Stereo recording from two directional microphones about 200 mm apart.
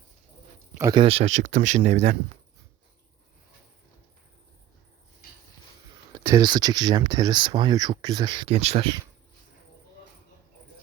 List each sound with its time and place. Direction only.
0.7 s a sound: 15° right (ahead or behind)
0.9 s speech: 30° right (ahead or behind)
6.1 s speech: 20° right (ahead or behind)